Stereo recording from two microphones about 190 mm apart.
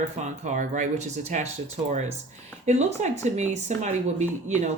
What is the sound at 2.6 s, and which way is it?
Speech, 40° right (ahead or behind).